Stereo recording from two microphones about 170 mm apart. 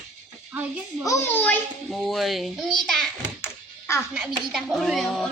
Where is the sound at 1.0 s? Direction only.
15° left (ahead or behind).